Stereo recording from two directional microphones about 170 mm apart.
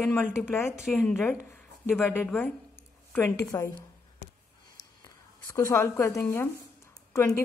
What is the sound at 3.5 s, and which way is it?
Speech, 15° left (ahead or behind).